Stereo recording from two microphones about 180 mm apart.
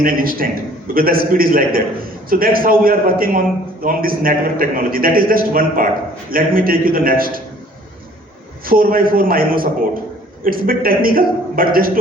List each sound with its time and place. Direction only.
0.0 s a man's voice: 55° right (ahead or behind)
8.6 s a man's voice: 55° right (ahead or behind)